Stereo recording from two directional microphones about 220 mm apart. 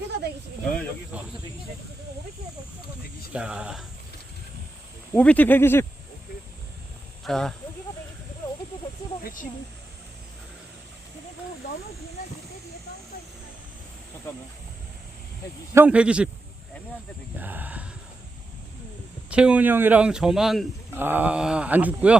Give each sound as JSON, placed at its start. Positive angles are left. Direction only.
{"t": 1.1, "sound": "speech", "side_deg": -5}
{"t": 3.3, "sound": "speech", "side_deg": -5}
{"t": 5.1, "sound": "speech", "side_deg": 5}
{"t": 7.3, "sound": "speech", "side_deg": 5}
{"t": 9.2, "sound": "speech", "side_deg": 35}
{"t": 15.7, "sound": "speech", "side_deg": -5}
{"t": 17.3, "sound": "speech", "side_deg": -10}
{"t": 19.3, "sound": "speech", "side_deg": -5}